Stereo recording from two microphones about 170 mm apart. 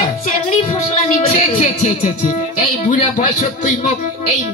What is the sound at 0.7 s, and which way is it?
Speech, 50° left (ahead or behind).